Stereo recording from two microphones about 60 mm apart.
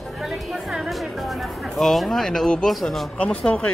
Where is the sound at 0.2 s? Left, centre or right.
Centre.